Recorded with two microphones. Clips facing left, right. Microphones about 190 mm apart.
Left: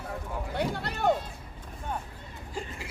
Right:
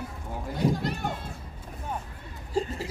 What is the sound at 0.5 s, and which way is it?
Speech, 65° left (ahead or behind).